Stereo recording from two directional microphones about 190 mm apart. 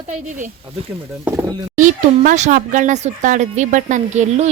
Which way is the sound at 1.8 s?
40° right (ahead or behind).